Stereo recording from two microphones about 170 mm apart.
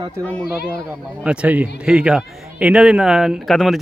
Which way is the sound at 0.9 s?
5° right (ahead or behind).